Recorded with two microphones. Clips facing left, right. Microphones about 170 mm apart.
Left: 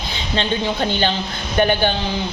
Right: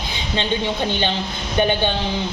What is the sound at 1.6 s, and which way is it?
Speech, 20° right (ahead or behind).